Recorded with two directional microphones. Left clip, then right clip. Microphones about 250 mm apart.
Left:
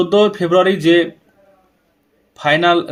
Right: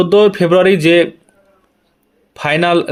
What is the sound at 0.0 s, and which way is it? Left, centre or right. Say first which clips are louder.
Speech: right 4 dB; right.